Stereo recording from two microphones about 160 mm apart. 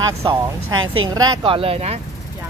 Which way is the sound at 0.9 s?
25° right (ahead or behind).